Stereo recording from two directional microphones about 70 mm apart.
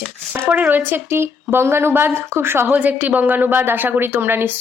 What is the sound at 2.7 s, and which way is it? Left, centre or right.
A woman's voice, right.